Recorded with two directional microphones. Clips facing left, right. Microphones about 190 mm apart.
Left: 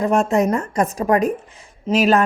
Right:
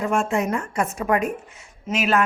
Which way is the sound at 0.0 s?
40° left (ahead or behind).